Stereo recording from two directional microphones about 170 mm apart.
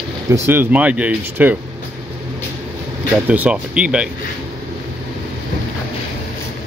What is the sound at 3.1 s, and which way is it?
Speech, 10° right (ahead or behind).